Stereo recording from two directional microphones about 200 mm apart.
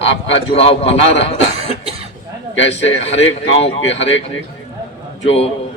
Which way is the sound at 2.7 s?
30° left (ahead or behind).